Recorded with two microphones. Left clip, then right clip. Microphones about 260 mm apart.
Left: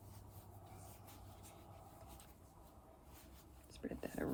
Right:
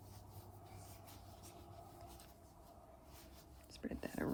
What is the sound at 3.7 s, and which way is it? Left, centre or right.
Whispering, right.